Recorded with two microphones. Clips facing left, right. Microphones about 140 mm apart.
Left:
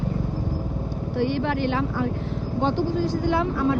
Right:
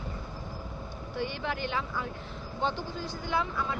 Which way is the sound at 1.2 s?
75° left (ahead or behind).